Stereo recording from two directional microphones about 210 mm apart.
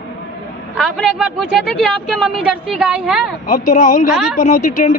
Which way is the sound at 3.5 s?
40° left (ahead or behind).